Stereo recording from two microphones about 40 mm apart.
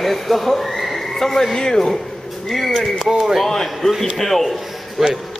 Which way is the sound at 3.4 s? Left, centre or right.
Centre.